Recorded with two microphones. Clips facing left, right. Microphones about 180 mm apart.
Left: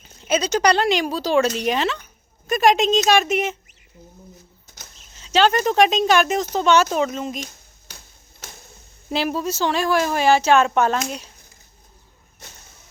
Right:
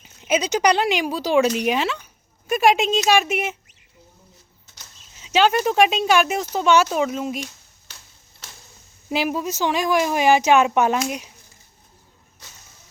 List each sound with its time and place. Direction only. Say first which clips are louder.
0.0 s speech: even; 15° right (ahead or behind)
5.1 s speech: even; 10° right (ahead or behind)
7.3 s a sound: right 1 dB; 40° left (ahead or behind)
9.0 s speech: even; 10° right (ahead or behind)